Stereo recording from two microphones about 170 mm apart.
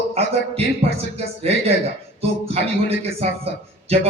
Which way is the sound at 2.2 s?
35° right (ahead or behind).